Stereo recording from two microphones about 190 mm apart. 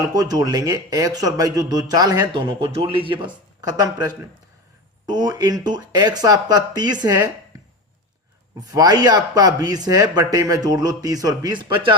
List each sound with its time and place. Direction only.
0.1 s speech: 20° right (ahead or behind)
8.7 s speech: 20° right (ahead or behind)